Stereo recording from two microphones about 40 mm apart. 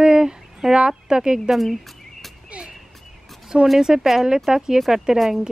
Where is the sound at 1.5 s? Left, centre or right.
Centre.